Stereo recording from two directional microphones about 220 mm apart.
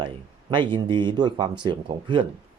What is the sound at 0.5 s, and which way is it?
Speech, 20° right (ahead or behind).